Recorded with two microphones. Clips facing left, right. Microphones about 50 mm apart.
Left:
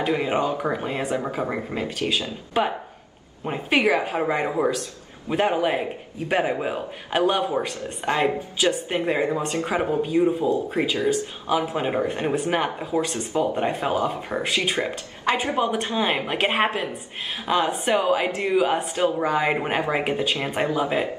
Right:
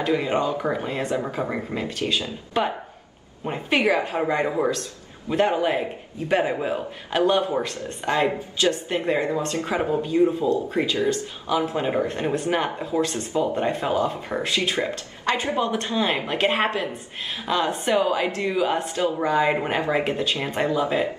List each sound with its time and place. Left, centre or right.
0.0 s a man's voice: centre
7.6 s speech: centre
8.0 s a woman's voice: left
13.1 s a woman's voice: left
13.6 s a man's voice: centre
14.9 s a man's voice: centre
15.4 s a woman's voice: left
17.9 s a woman's voice: left
19.2 s a man's voice: centre